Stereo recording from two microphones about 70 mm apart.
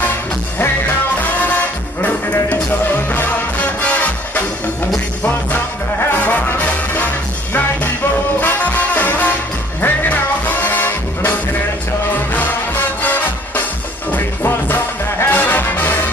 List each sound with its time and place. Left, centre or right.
1.2 s music: left
8.4 s music: left
12.4 s music: left